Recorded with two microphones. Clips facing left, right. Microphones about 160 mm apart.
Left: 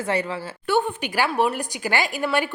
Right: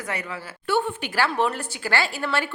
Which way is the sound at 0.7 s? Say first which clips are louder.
Left 2 dB; 15° left (ahead or behind).